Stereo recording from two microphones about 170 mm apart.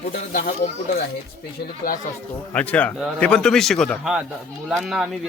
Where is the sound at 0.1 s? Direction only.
55° left (ahead or behind).